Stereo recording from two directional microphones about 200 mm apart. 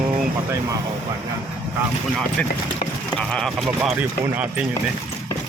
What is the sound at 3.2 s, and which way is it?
Speech, 5° left (ahead or behind).